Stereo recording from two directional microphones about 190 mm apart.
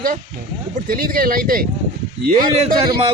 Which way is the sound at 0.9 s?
50° right (ahead or behind).